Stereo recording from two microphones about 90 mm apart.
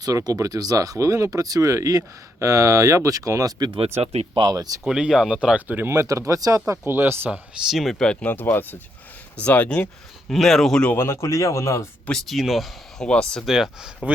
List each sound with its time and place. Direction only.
0.0 s speech: 40° right (ahead or behind)
3.7 s speech: 90° right
4.4 s speech: 45° right (ahead or behind)
4.9 s speech: 10° right (ahead or behind)
5.9 s speech: 40° right (ahead or behind)
6.9 s speech: 25° right (ahead or behind)
7.7 s speech: centre (ahead or behind)
10.9 s speech: 30° left (ahead or behind)
12.0 s speech: 5° left (ahead or behind)
13.1 s speech: 10° left (ahead or behind)
13.4 s speech: 5° right (ahead or behind)